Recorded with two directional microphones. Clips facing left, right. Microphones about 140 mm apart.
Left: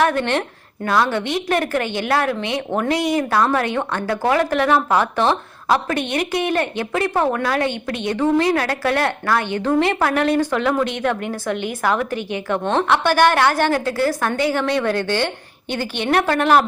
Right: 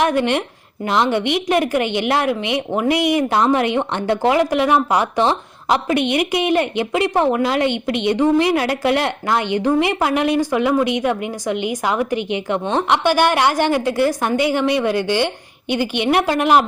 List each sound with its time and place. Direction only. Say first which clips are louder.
0.0 s a woman's voice: right 1 dB; 15° right (ahead or behind)